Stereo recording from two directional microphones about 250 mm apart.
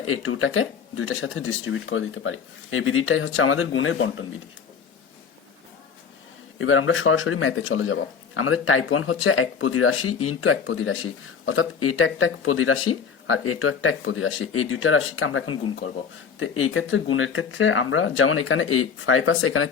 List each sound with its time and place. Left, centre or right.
0.0 s speech: left
6.6 s speech: left